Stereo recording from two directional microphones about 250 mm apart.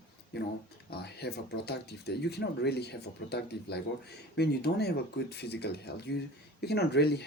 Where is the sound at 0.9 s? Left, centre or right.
Left.